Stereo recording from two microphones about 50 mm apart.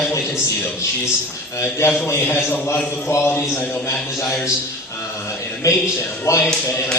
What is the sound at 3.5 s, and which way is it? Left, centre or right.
Speech, left.